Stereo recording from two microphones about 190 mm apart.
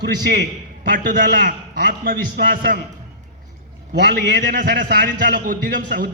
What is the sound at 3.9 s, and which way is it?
A man's voice, 60° right (ahead or behind).